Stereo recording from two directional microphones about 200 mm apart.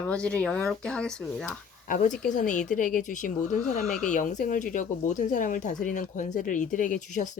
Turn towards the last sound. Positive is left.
turn(degrees=40)  # may be behind; listen again after turning